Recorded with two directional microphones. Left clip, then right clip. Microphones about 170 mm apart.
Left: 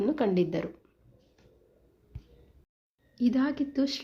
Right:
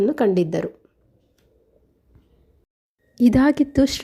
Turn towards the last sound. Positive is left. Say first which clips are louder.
# right 11 dB
turn(degrees=-50)  # may be behind; listen again after turning